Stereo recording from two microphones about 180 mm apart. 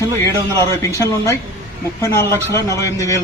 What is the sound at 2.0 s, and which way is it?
Speech, 15° left (ahead or behind).